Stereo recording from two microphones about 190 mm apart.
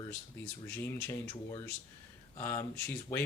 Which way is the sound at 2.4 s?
15° left (ahead or behind).